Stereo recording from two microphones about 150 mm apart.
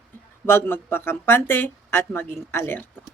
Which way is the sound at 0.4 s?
15° left (ahead or behind).